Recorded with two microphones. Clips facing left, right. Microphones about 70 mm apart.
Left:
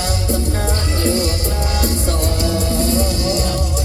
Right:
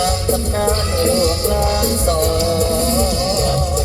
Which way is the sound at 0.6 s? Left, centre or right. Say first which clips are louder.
Right 3 dB; right.